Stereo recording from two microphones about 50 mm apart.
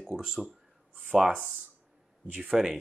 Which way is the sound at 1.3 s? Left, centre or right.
Right.